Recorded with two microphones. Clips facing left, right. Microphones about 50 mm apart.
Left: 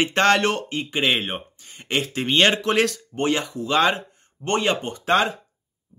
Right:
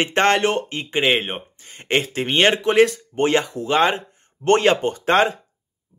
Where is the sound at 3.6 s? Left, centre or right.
Right.